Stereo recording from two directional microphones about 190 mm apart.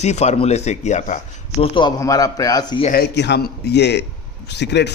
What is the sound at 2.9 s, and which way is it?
A man's voice, 60° left (ahead or behind).